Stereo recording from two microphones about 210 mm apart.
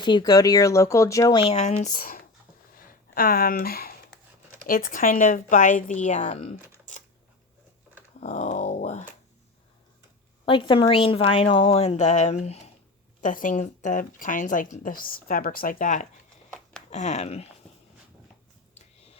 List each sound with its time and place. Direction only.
0.0 s a woman's voice: 20° left (ahead or behind); by 2.2 s 45° left (ahead or behind)
2.7 s a sound: 45° left (ahead or behind)
4.6 s speech: 40° left (ahead or behind)
6.9 s coin: 35° left (ahead or behind)
8.2 s speech: 35° left (ahead or behind)
10.4 s a woman's voice: 25° left (ahead or behind)